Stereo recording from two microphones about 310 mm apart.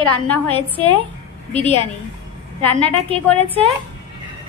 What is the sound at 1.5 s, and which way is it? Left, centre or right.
Speech, left.